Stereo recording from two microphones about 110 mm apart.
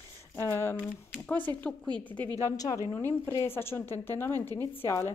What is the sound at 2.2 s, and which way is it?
Speech, 35° right (ahead or behind).